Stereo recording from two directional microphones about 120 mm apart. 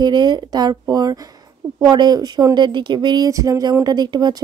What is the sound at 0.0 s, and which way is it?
A woman's voice, 40° right (ahead or behind).